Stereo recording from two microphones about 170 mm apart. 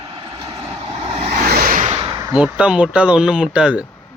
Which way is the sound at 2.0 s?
25° right (ahead or behind).